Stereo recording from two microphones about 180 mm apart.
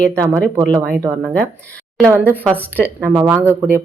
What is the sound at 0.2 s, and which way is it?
Speech, 20° right (ahead or behind).